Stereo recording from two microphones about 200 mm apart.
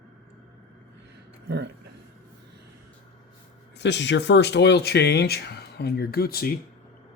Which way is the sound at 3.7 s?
60° left (ahead or behind).